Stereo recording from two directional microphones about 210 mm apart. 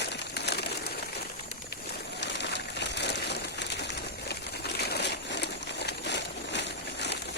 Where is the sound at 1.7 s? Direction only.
50° left (ahead or behind).